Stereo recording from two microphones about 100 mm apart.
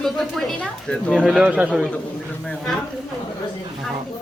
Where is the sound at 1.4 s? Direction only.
10° right (ahead or behind).